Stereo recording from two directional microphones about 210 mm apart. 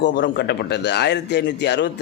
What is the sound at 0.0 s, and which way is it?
Speech, 55° left (ahead or behind).